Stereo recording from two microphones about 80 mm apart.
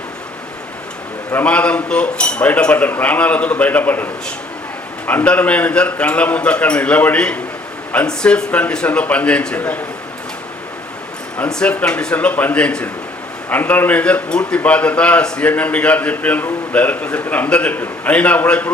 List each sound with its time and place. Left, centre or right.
1.5 s a man's voice: centre
11.4 s a man's voice: centre